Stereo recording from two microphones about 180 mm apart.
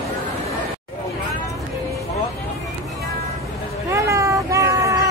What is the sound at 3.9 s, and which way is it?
Vehicle, 15° right (ahead or behind).